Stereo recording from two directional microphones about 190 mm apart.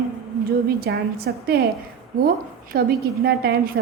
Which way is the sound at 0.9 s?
60° right (ahead or behind).